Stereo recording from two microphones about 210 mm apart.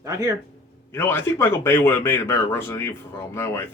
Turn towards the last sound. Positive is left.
turn(degrees=10)  # may be behind; listen again after turning